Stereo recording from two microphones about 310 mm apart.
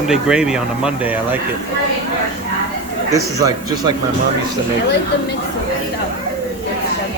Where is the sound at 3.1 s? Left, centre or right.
Centre.